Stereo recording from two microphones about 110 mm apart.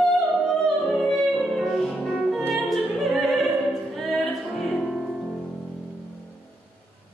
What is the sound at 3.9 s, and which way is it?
Music, 5° left (ahead or behind).